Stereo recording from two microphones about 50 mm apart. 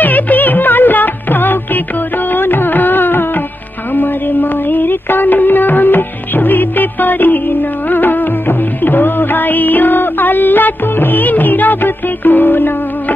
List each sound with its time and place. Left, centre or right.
0.0 s music of bollywood: left
2.3 s music: left
7.9 s music of bollywood: left